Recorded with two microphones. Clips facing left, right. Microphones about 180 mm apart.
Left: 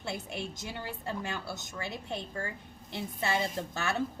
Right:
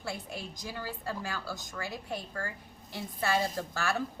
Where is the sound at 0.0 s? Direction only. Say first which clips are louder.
Left 2 dB; 20° left (ahead or behind).